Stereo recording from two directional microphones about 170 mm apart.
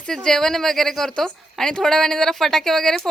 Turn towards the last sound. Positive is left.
turn(degrees=0)  # may be behind; listen again after turning